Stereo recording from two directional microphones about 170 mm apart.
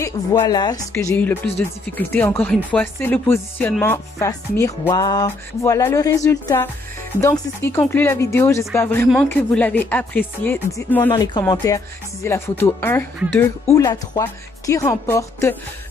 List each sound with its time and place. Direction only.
0.0 s speech: 20° left (ahead or behind)
3.8 s music: 15° left (ahead or behind)
7.2 s speech: 15° left (ahead or behind)
11.1 s speech: 20° left (ahead or behind)
13.7 s music: 20° left (ahead or behind)